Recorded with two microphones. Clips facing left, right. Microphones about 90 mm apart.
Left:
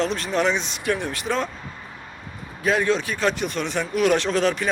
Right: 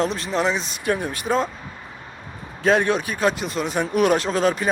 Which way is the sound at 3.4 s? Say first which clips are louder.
Right 1 dB; 5° right (ahead or behind).